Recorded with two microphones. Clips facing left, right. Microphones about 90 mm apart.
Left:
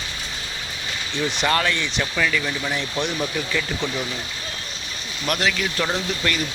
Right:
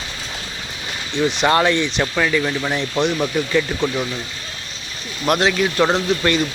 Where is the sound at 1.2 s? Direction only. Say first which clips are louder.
Right 6 dB; 20° right (ahead or behind).